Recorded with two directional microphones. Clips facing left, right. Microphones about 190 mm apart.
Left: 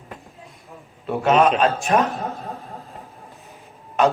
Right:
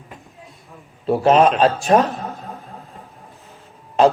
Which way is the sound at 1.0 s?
35° right (ahead or behind).